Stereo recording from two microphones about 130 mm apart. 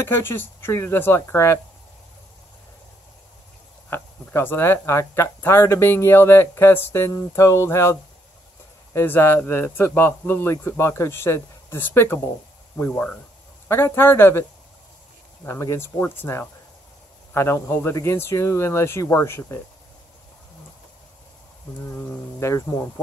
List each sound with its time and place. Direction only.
0.0 s speech: 20° left (ahead or behind)
3.9 s speech: 15° left (ahead or behind)
15.4 s speech: 20° left (ahead or behind)
21.9 s speech: 25° left (ahead or behind)